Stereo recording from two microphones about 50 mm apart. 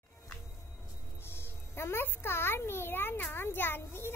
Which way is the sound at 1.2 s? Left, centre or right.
Left.